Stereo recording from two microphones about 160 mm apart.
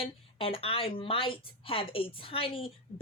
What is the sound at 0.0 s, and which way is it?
A woman's voice, 35° left (ahead or behind).